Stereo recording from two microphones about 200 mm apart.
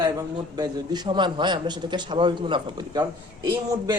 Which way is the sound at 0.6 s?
20° right (ahead or behind).